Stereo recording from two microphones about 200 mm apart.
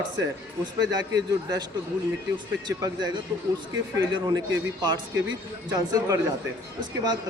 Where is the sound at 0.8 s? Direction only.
20° right (ahead or behind).